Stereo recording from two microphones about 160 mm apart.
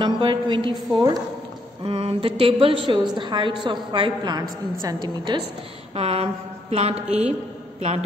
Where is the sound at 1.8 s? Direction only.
35° right (ahead or behind).